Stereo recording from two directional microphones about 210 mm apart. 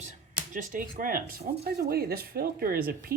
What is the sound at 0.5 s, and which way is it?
A woman's voice, 40° right (ahead or behind).